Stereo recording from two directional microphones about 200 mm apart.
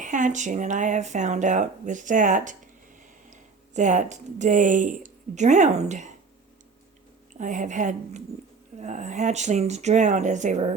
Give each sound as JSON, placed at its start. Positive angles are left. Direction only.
{"t": 0.0, "sound": "speech", "side_deg": -40}
{"t": 3.8, "sound": "speech", "side_deg": -35}
{"t": 7.3, "sound": "speech", "side_deg": -40}